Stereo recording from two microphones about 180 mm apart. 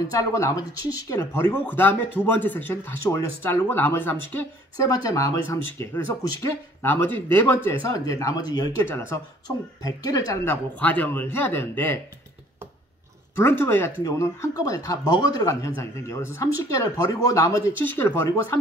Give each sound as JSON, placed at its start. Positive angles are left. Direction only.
{"t": 0.2, "sound": "speech", "side_deg": 15}
{"t": 13.4, "sound": "speech", "side_deg": 15}